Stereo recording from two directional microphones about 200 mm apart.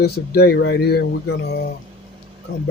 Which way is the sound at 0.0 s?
55° left (ahead or behind).